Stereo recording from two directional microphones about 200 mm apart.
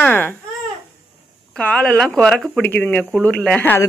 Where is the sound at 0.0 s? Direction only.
10° left (ahead or behind).